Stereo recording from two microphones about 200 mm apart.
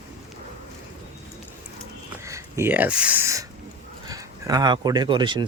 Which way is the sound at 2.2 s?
15° right (ahead or behind).